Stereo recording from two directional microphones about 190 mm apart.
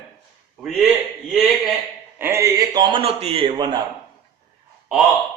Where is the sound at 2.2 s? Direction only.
15° right (ahead or behind); by 3.6 s 30° right (ahead or behind).